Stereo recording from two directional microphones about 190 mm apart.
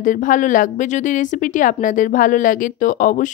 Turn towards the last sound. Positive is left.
turn(degrees=45)  # may be behind; listen again after turning